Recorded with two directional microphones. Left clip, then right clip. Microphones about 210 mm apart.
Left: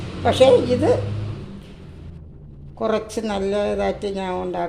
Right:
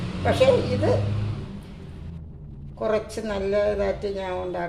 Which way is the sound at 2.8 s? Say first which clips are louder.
Left 3 dB; 40° left (ahead or behind).